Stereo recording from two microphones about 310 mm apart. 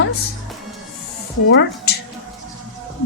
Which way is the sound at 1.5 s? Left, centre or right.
Left.